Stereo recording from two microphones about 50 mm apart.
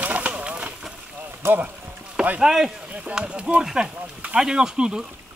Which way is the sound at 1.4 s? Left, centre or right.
Right.